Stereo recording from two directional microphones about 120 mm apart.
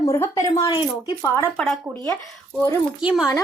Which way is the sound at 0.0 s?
25° left (ahead or behind).